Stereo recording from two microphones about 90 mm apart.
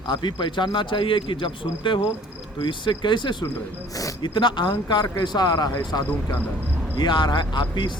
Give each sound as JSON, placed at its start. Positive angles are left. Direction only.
{"t": 0.1, "sound": "speech", "side_deg": 60}